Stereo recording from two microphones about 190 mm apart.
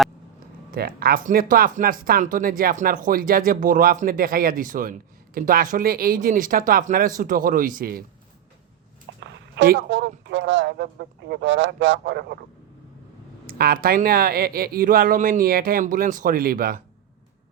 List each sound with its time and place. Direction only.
0.7 s speech: 55° right (ahead or behind)
9.2 s a man's voice: 65° right (ahead or behind)
13.5 s speech: 50° right (ahead or behind)